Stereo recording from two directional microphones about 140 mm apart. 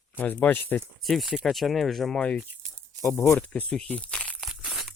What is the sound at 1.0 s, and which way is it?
Speech, centre (ahead or behind).